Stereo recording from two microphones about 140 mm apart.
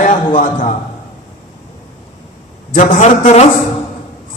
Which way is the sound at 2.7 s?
65° left (ahead or behind).